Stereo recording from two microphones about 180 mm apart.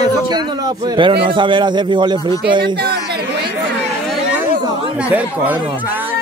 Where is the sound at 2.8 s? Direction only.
65° right (ahead or behind).